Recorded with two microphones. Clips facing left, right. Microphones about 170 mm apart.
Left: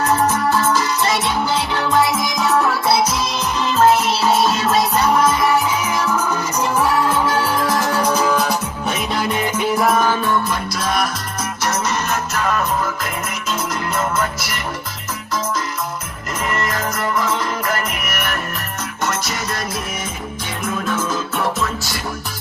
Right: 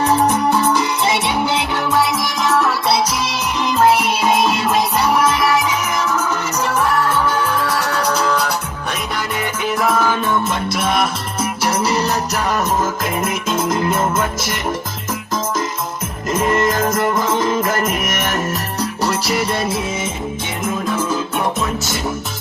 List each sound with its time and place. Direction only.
0.0 s music: 15° right (ahead or behind)
1.9 s music: centre (ahead or behind)
3.6 s music: 10° right (ahead or behind)
6.7 s music: 10° left (ahead or behind)
9.7 s music: centre (ahead or behind)
10.8 s music: 25° right (ahead or behind)
14.0 s music: 25° right (ahead or behind)
16.8 s music: 45° right (ahead or behind)
17.4 s music: 20° right (ahead or behind)
18.0 s music: 45° right (ahead or behind)
19.0 s music: 30° right (ahead or behind)
20.7 s music: 10° right (ahead or behind)